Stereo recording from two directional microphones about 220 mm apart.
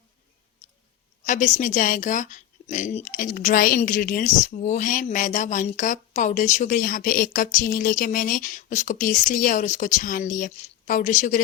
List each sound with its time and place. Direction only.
1.2 s a woman's voice: 35° left (ahead or behind)